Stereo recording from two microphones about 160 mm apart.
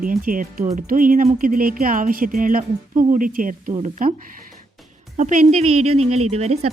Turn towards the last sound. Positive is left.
turn(degrees=-40)  # may be behind; listen again after turning